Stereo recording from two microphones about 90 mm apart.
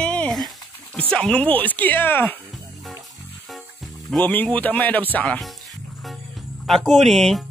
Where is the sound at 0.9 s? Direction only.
10° left (ahead or behind).